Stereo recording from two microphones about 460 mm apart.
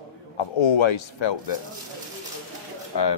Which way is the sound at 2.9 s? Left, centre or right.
Left.